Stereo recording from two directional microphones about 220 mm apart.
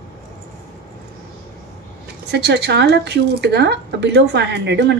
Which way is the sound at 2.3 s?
50° right (ahead or behind).